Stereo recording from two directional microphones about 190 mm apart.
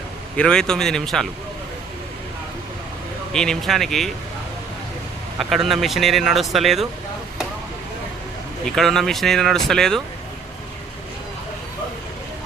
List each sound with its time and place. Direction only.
0.3 s speech: 5° left (ahead or behind)
3.3 s speech: 5° left (ahead or behind)
5.4 s speech: centre (ahead or behind)
8.6 s speech: centre (ahead or behind)